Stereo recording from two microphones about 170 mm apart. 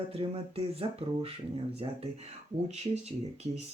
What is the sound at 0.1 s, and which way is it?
Speech, 35° right (ahead or behind).